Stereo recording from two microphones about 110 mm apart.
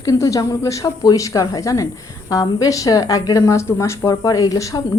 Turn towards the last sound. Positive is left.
turn(degrees=30)  # may be behind; listen again after turning